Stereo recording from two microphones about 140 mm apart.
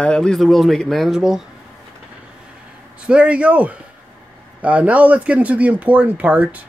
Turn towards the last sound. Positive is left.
turn(degrees=-10)  # may be behind; listen again after turning